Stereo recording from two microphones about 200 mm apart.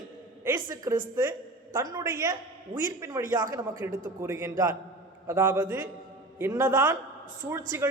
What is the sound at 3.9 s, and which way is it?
Speech, 40° right (ahead or behind).